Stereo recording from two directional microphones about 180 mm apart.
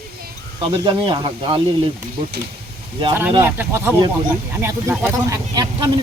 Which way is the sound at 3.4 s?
15° right (ahead or behind).